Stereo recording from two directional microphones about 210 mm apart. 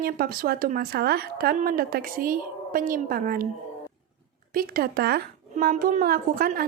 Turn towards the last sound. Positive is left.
turn(degrees=-45)  # may be behind; listen again after turning